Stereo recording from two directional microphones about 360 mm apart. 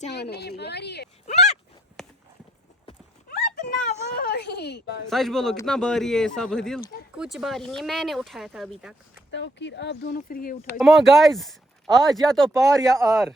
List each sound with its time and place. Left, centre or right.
0.0 s a woman's voice: left
2.0 s clip-clop: centre
3.2 s a sound: left
5.0 s speech: centre
9.3 s a woman's voice: left
10.8 s speech: centre